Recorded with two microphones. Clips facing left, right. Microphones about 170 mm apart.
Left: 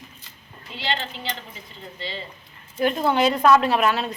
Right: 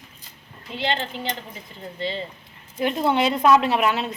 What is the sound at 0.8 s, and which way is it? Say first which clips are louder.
Speech: right 3 dB; 50° right (ahead or behind).